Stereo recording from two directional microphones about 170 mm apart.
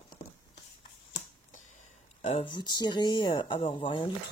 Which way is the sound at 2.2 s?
30° left (ahead or behind).